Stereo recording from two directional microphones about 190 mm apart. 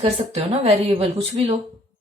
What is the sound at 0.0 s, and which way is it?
A woman's voice, 35° right (ahead or behind).